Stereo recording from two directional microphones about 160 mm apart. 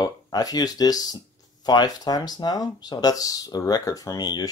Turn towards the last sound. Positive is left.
turn(degrees=25)  # may be behind; listen again after turning